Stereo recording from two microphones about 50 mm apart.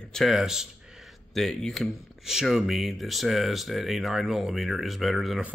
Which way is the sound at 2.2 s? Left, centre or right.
Centre.